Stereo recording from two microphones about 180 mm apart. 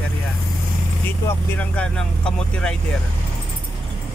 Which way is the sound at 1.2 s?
10° left (ahead or behind).